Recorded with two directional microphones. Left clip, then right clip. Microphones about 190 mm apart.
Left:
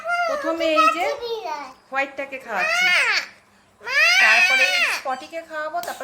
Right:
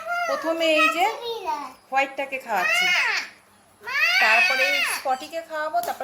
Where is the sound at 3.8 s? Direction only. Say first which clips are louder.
Left 4 dB; 65° left (ahead or behind).